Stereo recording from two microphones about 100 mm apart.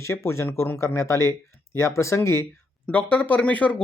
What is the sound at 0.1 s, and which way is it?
Speech, 25° left (ahead or behind).